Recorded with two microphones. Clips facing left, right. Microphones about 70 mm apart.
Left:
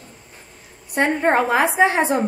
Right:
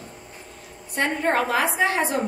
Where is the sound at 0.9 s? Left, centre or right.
Left.